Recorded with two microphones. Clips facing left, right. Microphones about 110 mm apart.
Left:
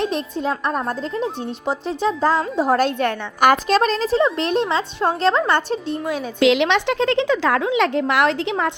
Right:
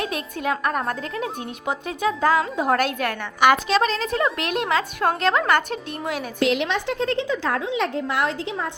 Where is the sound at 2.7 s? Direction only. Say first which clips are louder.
Left 4 dB; 30° left (ahead or behind).